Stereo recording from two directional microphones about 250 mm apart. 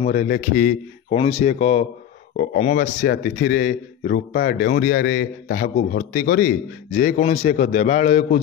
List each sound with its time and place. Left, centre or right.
0.0 s a man's voice: left